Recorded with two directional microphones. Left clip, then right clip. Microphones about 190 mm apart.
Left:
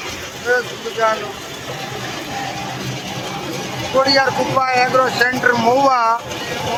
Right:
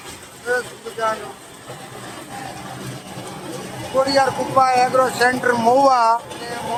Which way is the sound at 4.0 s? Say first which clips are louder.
Left 2 dB; 20° right (ahead or behind).